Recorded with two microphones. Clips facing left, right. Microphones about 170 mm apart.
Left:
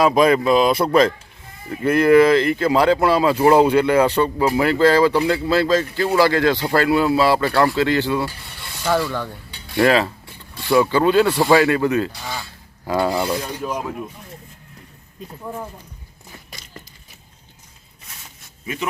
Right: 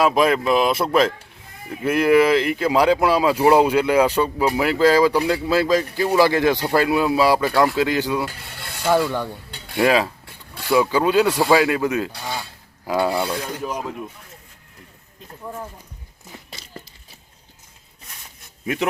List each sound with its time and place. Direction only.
0.0 s speech: 5° right (ahead or behind)
12.3 s filing: 5° right (ahead or behind)
15.3 s speech: 5° left (ahead or behind)
16.7 s a sound: 35° right (ahead or behind)
18.6 s a man's voice: 70° right (ahead or behind)